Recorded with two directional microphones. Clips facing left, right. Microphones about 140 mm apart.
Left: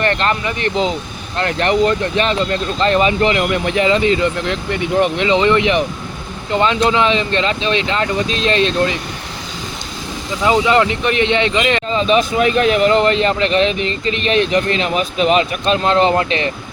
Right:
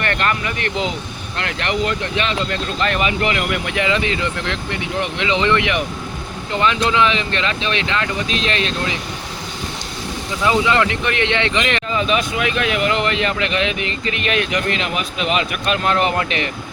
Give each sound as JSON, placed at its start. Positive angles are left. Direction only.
{"t": 0.0, "sound": "speech", "side_deg": 30}
{"t": 10.4, "sound": "speech", "side_deg": 25}